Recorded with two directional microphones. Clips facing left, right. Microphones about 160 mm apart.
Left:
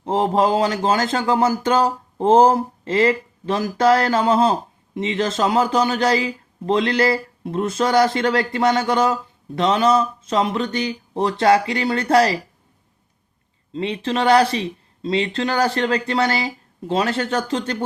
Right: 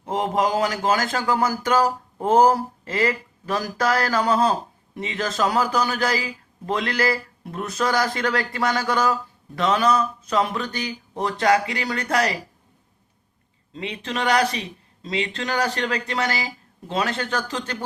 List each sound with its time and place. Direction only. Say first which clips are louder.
0.0 s speech: left 4 dB; 30° left (ahead or behind)
13.7 s speech: left 6 dB; 30° left (ahead or behind)